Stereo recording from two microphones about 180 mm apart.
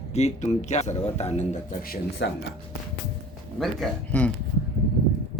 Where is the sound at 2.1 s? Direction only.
75° left (ahead or behind).